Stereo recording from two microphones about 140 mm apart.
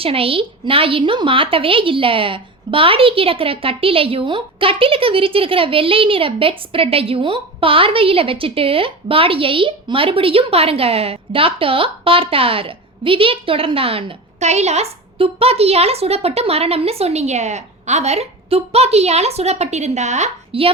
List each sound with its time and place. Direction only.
0.0 s a woman's voice: 40° right (ahead or behind)